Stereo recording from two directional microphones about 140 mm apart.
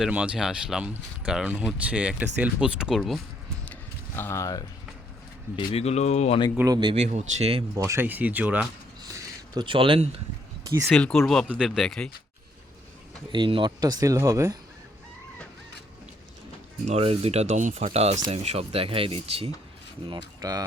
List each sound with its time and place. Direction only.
0.0 s speech: 5° right (ahead or behind)
3.7 s a sound: 15° left (ahead or behind)
5.5 s speech: 45° left (ahead or behind)
6.7 s speech: 30° right (ahead or behind)
6.9 s speech: 50° right (ahead or behind)
7.8 s speech: 20° right (ahead or behind)
9.0 s a sound: 25° right (ahead or behind)
9.6 s speech: 40° right (ahead or behind)
10.8 s speech: 5° left (ahead or behind)
11.4 s speech: 5° right (ahead or behind)
13.3 s speech: 35° right (ahead or behind)
16.8 s speech: 45° right (ahead or behind)
20.1 s speech: 25° right (ahead or behind)